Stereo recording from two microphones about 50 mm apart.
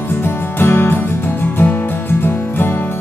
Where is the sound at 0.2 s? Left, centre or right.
Left.